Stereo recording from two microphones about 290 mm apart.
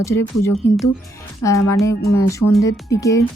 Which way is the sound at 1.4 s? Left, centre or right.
Left.